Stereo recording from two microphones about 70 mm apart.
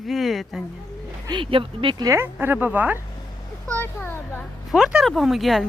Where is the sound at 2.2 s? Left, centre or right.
Right.